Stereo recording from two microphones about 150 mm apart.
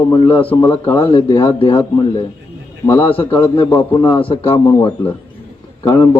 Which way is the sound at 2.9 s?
15° left (ahead or behind).